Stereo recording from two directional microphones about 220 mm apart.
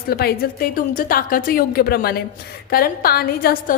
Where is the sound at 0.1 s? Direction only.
45° left (ahead or behind).